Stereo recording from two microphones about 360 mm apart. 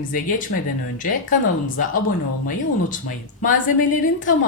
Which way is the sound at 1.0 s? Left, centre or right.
Left.